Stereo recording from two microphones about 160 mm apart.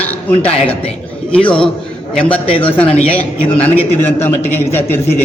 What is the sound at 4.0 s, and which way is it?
A man's voice, 15° left (ahead or behind).